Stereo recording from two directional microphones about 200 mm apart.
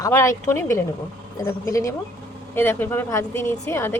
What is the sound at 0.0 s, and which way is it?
A woman's voice, 15° left (ahead or behind).